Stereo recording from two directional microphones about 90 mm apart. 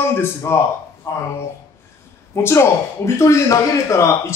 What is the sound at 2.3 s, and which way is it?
Speech, 30° left (ahead or behind).